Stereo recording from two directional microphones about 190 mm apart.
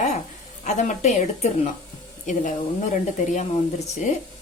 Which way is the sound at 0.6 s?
40° left (ahead or behind).